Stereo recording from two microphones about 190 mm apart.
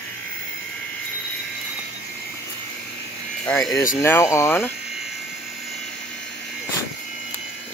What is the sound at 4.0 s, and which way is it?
Speech, 15° left (ahead or behind).